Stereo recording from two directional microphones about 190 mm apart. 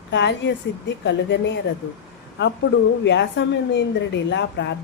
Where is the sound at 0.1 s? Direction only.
65° left (ahead or behind).